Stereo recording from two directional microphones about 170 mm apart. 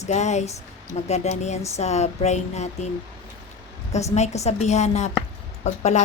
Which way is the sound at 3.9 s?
40° left (ahead or behind).